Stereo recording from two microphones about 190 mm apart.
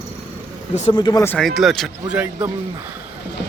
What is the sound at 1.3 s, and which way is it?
Speech, 5° left (ahead or behind).